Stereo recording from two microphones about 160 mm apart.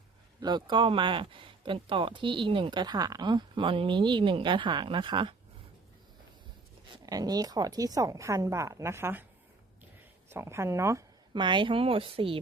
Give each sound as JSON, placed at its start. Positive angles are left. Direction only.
{"t": 0.3, "sound": "speech", "side_deg": -25}
{"t": 6.8, "sound": "speech", "side_deg": -25}
{"t": 10.2, "sound": "speech", "side_deg": -15}
{"t": 11.3, "sound": "speech", "side_deg": -30}